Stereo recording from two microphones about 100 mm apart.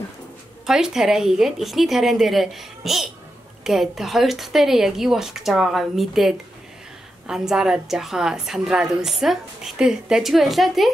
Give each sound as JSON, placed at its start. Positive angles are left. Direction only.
{"t": 0.7, "sound": "a woman's voice", "side_deg": -5}